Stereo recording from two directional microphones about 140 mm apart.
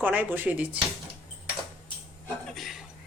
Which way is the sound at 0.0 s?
15° right (ahead or behind).